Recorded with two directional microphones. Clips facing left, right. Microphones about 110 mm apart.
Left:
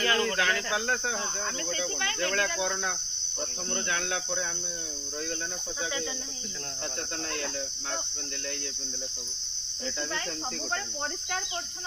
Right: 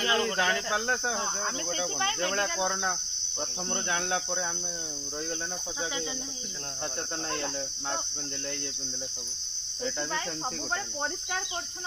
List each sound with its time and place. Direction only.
0.0 s speech: 20° right (ahead or behind)